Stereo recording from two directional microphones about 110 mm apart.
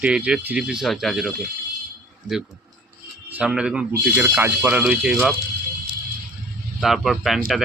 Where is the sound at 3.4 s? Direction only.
5° right (ahead or behind).